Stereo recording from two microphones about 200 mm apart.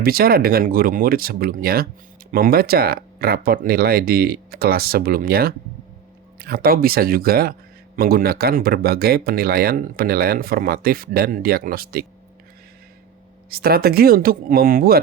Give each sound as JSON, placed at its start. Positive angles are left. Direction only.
{"t": 0.0, "sound": "speech", "side_deg": -50}
{"t": 13.5, "sound": "speech", "side_deg": -50}